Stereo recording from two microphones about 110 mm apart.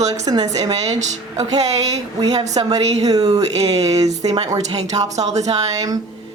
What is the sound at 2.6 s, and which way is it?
Speech, 50° right (ahead or behind).